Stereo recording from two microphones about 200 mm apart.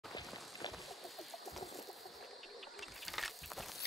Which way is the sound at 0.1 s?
20° left (ahead or behind).